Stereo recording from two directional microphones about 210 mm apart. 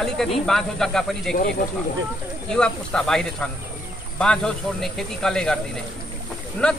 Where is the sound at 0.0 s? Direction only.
Centre (ahead or behind).